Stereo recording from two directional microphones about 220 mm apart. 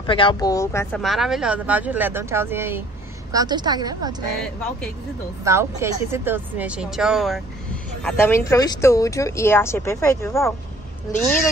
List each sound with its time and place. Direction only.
0.0 s speech: 20° left (ahead or behind)
0.9 s speech: centre (ahead or behind); by 4.1 s 20° right (ahead or behind)
5.4 s speech: 10° right (ahead or behind)
8.0 s speech: 10° left (ahead or behind)